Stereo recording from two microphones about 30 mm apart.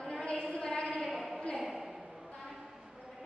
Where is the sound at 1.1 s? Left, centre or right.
Centre.